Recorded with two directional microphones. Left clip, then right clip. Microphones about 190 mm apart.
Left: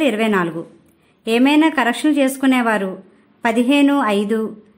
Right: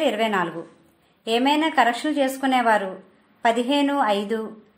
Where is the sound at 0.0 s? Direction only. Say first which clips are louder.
Left 4 dB; 30° left (ahead or behind).